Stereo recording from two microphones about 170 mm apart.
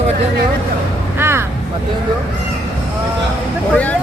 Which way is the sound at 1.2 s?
15° right (ahead or behind).